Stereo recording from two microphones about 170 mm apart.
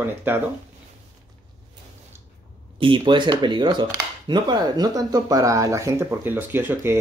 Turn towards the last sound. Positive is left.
turn(degrees=-10)  # may be behind; listen again after turning